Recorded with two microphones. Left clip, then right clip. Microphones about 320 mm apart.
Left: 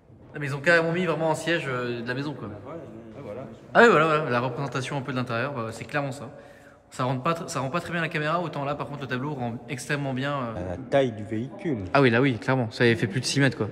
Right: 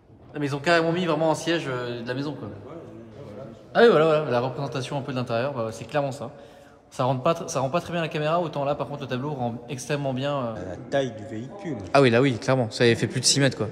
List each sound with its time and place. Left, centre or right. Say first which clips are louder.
0.3 s a man's voice: even; centre
3.7 s a man's voice: even; centre
10.6 s a man's voice: left 3 dB; centre
11.8 s a man's voice: right 2 dB; centre